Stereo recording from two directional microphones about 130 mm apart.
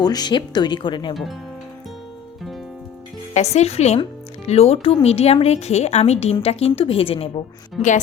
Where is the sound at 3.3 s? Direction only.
60° left (ahead or behind).